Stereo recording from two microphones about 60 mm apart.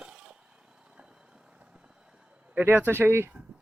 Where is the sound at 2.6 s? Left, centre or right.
Right.